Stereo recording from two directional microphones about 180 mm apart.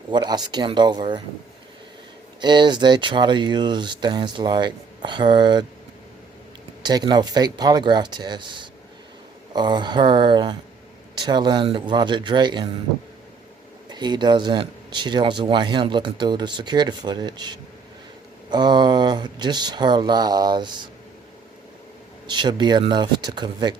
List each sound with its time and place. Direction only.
0.1 s speech: 25° right (ahead or behind)
2.4 s speech: 25° right (ahead or behind)
6.8 s speech: 25° right (ahead or behind)
13.9 s speech: 25° right (ahead or behind)
22.3 s speech: 25° right (ahead or behind)